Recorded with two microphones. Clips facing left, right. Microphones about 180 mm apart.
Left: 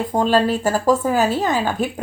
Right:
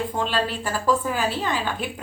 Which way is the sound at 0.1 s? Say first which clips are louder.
Left 8 dB; 45° left (ahead or behind).